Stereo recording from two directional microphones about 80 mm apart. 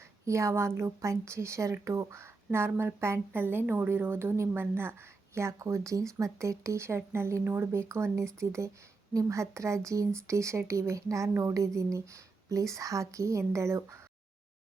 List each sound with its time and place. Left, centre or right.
0.3 s a woman's voice: right